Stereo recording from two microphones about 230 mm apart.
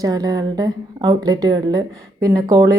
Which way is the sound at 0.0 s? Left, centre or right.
Centre.